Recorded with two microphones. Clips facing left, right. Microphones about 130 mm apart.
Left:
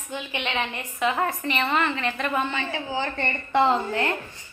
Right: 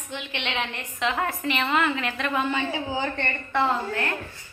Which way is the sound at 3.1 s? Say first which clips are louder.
Left 3 dB; 15° left (ahead or behind).